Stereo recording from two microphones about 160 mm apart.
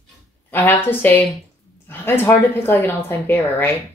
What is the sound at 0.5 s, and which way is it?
Speech, 10° left (ahead or behind).